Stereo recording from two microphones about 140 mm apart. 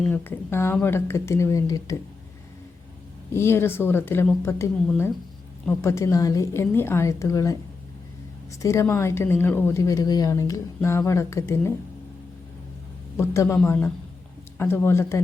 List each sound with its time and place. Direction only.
0.1 s speech: 15° left (ahead or behind)
3.3 s speech: 15° left (ahead or behind)
8.6 s speech: 20° left (ahead or behind)
13.1 s speech: 20° left (ahead or behind)